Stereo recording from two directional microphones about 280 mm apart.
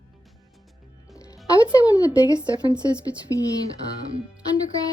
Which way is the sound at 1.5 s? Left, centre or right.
Centre.